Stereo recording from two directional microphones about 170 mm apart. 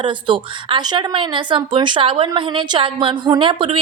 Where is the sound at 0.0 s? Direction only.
30° right (ahead or behind).